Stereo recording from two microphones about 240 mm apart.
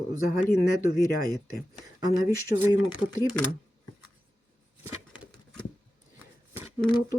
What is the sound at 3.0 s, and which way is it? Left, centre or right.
Speech, centre.